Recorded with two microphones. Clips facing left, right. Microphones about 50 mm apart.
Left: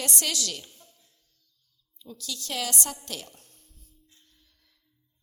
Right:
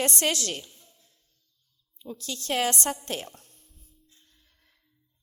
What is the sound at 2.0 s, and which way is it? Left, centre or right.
A woman's voice, right.